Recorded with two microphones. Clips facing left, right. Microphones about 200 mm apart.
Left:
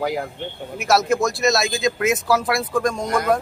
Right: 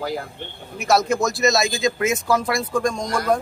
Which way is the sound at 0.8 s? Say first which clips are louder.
Left 1 dB; centre (ahead or behind).